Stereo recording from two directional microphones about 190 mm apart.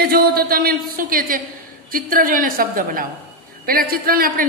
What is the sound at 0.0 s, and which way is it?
A woman's voice, 55° right (ahead or behind).